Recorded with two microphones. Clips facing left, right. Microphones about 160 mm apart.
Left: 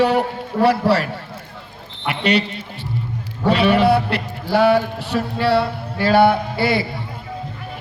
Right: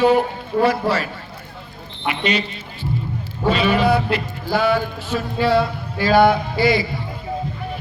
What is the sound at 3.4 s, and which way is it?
Speech, 65° left (ahead or behind).